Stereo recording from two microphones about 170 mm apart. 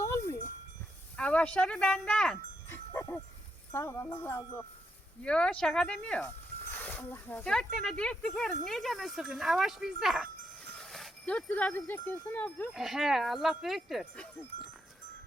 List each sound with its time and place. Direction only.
0.0 s a sound: 15° left (ahead or behind)
1.1 s speech: 5° left (ahead or behind)
2.6 s livestock: 15° left (ahead or behind)
3.7 s wind chime: 15° left (ahead or behind)
5.2 s speech: 5° left (ahead or behind)
12.3 s wind chime: 10° left (ahead or behind)
12.7 s speech: centre (ahead or behind)